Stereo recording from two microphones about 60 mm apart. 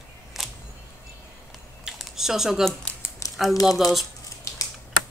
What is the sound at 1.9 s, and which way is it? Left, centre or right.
Typing, centre.